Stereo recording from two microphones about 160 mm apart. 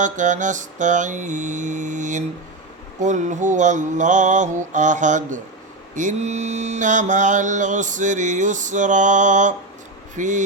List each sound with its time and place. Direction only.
0.0 s mantra: 50° right (ahead or behind)